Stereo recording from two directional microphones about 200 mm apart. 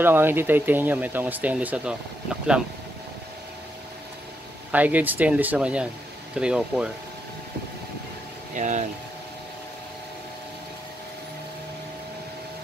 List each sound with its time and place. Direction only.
0.0 s speech: 10° right (ahead or behind)
4.6 s speech: 10° right (ahead or behind)
8.5 s speech: 40° right (ahead or behind)